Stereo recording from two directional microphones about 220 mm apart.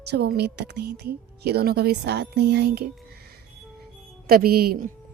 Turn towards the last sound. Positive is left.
turn(degrees=-45)  # may be behind; listen again after turning